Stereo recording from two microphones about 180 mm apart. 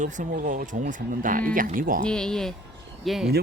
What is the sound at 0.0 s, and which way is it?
Speech, 45° right (ahead or behind).